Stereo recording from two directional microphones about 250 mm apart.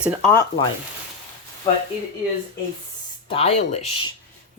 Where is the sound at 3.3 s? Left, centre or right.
Left.